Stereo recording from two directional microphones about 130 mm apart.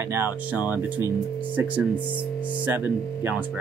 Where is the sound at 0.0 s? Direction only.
20° right (ahead or behind).